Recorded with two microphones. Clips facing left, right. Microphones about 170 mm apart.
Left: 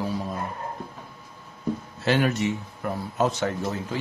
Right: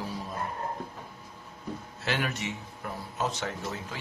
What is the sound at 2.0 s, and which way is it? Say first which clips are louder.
Speech: left 9 dB; 35° left (ahead or behind).